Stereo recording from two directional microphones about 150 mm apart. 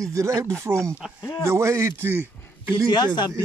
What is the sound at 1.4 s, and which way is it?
Speech, 20° right (ahead or behind).